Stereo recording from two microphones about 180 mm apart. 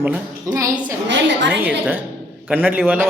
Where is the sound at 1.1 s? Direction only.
75° right (ahead or behind).